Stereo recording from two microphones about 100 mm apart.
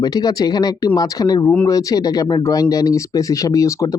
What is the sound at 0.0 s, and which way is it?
Speech, 40° left (ahead or behind).